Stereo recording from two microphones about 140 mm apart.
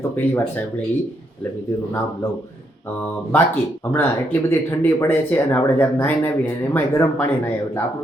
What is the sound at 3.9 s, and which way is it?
Speech, 15° left (ahead or behind).